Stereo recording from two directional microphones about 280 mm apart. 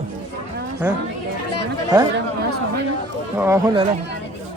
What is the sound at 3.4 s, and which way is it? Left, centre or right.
Speech, centre.